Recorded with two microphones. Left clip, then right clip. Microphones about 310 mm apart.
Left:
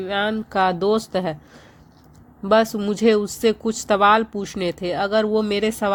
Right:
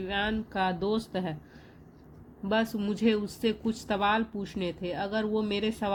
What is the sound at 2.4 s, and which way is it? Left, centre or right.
A woman's voice, left.